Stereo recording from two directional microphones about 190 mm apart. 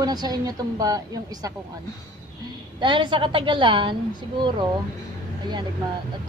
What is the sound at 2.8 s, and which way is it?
A woman's voice, 25° right (ahead or behind).